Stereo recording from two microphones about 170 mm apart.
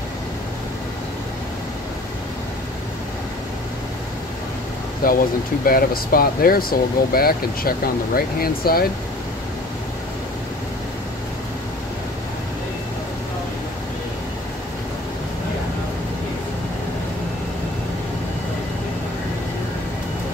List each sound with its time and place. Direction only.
5.0 s speech: 60° left (ahead or behind)